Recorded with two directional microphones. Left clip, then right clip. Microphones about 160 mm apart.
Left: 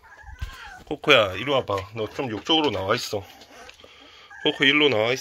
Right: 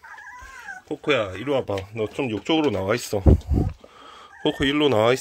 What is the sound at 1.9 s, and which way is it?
Speech, 45° right (ahead or behind).